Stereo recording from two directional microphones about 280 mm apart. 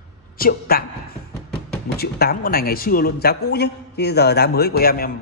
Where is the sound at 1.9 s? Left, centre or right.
Left.